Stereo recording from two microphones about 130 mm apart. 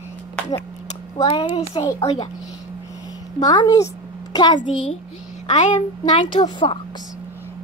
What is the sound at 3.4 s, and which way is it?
A woman's voice, 30° left (ahead or behind).